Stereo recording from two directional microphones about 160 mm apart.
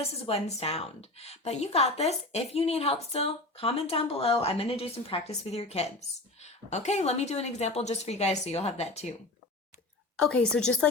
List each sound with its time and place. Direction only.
0.0 s a woman's voice: 40° left (ahead or behind)
10.2 s a woman's voice: 5° left (ahead or behind)